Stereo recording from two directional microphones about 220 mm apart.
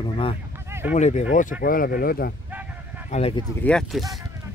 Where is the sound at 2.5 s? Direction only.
10° right (ahead or behind).